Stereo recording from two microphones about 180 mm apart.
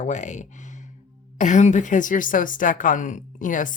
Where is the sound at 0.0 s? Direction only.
40° left (ahead or behind).